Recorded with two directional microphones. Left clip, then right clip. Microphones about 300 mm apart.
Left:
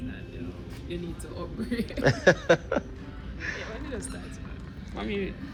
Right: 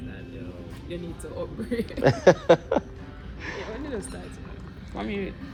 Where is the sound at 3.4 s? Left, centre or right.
Centre.